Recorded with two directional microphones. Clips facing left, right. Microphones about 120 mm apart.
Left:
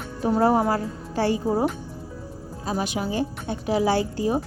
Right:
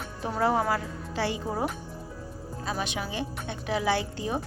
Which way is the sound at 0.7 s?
45° left (ahead or behind).